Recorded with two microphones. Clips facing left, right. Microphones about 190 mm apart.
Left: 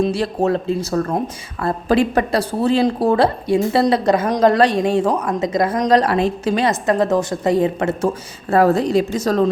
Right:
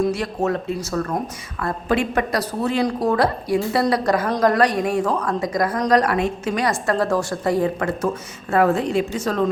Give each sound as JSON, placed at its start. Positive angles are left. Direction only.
{"t": 0.0, "sound": "a woman's voice", "side_deg": 30}
{"t": 8.4, "sound": "speech", "side_deg": 35}